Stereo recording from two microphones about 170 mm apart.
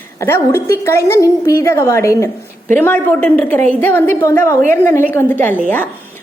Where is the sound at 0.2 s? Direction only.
15° left (ahead or behind).